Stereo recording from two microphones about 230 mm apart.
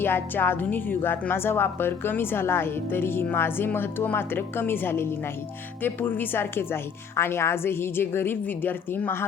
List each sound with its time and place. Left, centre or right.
0.0 s speech: centre